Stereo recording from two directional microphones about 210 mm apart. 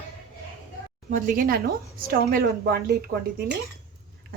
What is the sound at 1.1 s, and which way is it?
A woman's voice, 45° right (ahead or behind).